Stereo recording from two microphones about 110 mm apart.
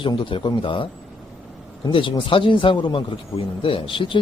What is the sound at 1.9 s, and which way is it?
Speech, 50° left (ahead or behind).